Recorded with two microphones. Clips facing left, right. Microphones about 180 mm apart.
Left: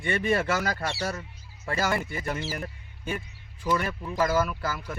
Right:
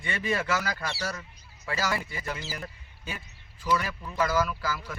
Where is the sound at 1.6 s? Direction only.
55° left (ahead or behind).